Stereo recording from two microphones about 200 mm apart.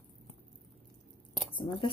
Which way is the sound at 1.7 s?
15° left (ahead or behind).